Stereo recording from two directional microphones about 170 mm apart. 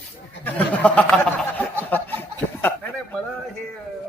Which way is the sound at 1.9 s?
10° left (ahead or behind).